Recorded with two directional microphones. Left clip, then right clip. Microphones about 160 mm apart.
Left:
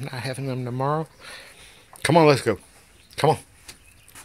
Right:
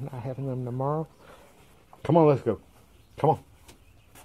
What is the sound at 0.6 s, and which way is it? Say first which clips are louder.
Speech: left 5 dB; 35° left (ahead or behind).